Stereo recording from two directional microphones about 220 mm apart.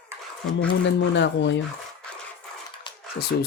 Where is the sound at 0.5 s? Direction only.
50° left (ahead or behind).